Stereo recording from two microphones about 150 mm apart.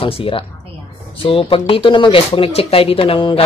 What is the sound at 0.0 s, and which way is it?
Speech, 40° left (ahead or behind).